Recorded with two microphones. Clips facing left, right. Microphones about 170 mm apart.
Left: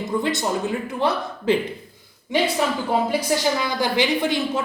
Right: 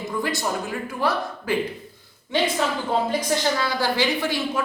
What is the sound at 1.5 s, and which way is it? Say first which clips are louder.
Speech: left 4 dB; 20° left (ahead or behind).